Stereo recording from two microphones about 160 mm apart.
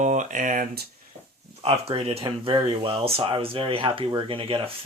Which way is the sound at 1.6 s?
40° right (ahead or behind).